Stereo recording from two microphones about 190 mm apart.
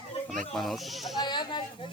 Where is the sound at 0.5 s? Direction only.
Centre (ahead or behind).